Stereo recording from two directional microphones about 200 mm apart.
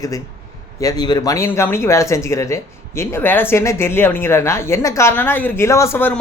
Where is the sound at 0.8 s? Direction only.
20° left (ahead or behind).